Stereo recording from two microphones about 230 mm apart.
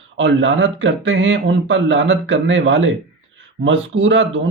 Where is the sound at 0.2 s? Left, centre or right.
Right.